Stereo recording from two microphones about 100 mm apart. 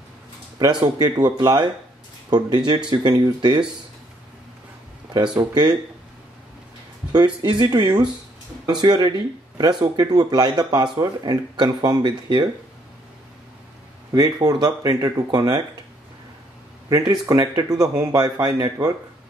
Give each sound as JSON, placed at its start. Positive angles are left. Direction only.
{"t": 0.7, "sound": "speech", "side_deg": -45}
{"t": 5.1, "sound": "speech", "side_deg": -45}
{"t": 7.1, "sound": "speech", "side_deg": -45}
{"t": 14.1, "sound": "a man's voice", "side_deg": -40}
{"t": 16.9, "sound": "a man's voice", "side_deg": -40}